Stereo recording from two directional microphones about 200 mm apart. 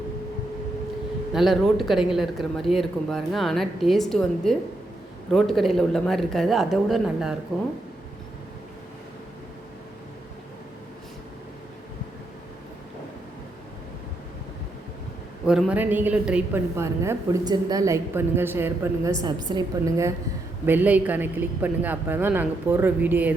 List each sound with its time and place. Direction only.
1.3 s speech: centre (ahead or behind)
15.4 s a woman's voice: 5° right (ahead or behind)